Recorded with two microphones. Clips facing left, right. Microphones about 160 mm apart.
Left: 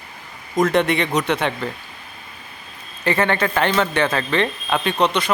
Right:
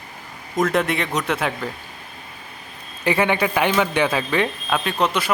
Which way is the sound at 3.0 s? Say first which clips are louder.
Even; 10° right (ahead or behind).